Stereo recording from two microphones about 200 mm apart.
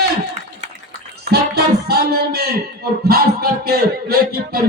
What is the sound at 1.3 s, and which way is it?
Speech, 55° right (ahead or behind).